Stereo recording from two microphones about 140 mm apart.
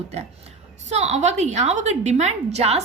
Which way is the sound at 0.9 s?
50° right (ahead or behind).